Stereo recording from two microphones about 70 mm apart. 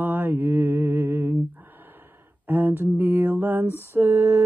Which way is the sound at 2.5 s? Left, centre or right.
Right.